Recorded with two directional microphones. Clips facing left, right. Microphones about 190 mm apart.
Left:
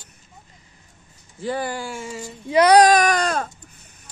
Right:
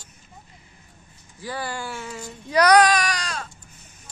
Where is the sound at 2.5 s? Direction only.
25° left (ahead or behind).